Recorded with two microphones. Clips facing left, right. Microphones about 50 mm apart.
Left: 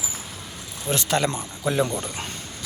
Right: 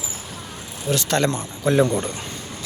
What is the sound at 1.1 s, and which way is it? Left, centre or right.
Speech, centre.